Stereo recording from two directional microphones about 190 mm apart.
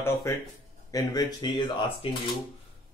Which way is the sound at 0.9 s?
20° left (ahead or behind).